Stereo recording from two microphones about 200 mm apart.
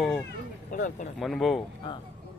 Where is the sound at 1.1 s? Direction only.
Centre (ahead or behind).